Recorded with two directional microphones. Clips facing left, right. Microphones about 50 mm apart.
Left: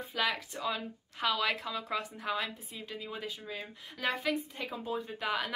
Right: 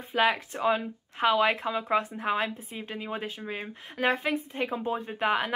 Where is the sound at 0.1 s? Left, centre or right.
Right.